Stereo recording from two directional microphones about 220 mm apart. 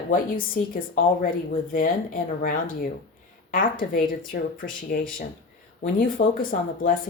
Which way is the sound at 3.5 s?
40° left (ahead or behind).